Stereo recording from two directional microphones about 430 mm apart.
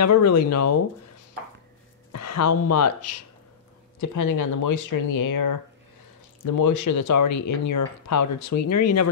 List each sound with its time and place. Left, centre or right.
0.0 s speech: left
2.1 s speech: left